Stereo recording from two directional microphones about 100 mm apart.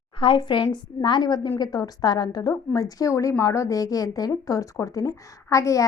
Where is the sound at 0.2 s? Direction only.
55° left (ahead or behind).